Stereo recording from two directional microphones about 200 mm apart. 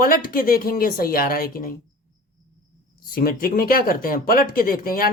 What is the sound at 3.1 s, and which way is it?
Speech, 45° left (ahead or behind).